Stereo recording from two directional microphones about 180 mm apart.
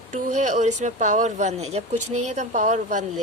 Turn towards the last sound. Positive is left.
turn(degrees=-40)  # may be behind; listen again after turning